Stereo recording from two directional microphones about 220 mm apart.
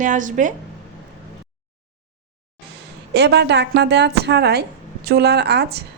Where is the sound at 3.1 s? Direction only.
50° right (ahead or behind).